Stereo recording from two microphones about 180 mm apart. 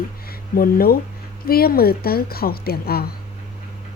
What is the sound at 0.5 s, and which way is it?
A woman's voice, 55° left (ahead or behind).